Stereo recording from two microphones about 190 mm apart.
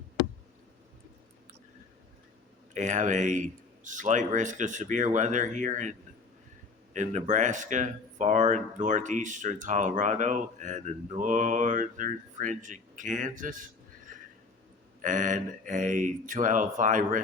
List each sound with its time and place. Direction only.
2.7 s speech: 40° right (ahead or behind)
6.9 s speech: 40° right (ahead or behind)
14.1 s neigh: 45° right (ahead or behind)
15.0 s speech: 40° right (ahead or behind)